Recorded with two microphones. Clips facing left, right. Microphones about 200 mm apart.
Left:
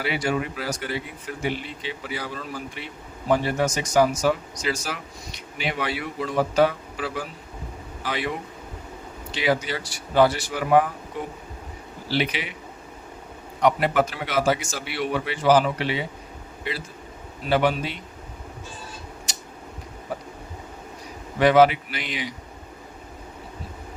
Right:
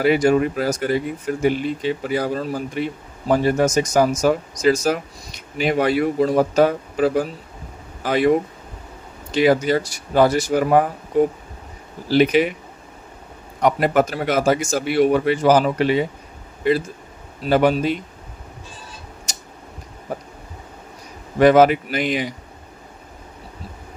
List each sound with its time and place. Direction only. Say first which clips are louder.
0.0 s speech: right 10 dB; 45° right (ahead or behind)
13.6 s speech: right 3 dB; 45° right (ahead or behind)
19.3 s a sound: right 1 dB; 45° right (ahead or behind)
21.3 s speech: right 4 dB; 45° right (ahead or behind)